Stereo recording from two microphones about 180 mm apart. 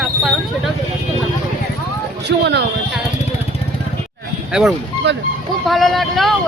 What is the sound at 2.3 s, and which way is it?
Speech, 70° right (ahead or behind).